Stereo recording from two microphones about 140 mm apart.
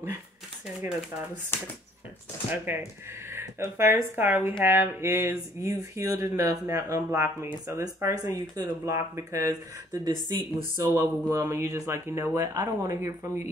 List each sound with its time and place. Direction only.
1.5 s speech: 15° left (ahead or behind)
2.5 s speech: 15° right (ahead or behind)
10.8 s speech: 20° right (ahead or behind)